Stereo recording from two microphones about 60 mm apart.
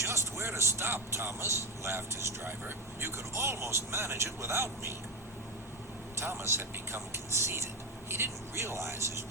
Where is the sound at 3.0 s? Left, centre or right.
Right.